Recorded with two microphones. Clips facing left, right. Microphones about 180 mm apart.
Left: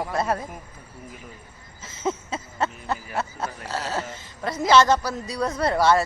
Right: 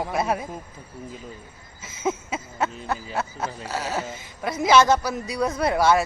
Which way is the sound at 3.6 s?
15° right (ahead or behind).